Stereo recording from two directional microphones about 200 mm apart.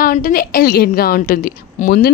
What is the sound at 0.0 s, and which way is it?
A woman's voice, 45° left (ahead or behind).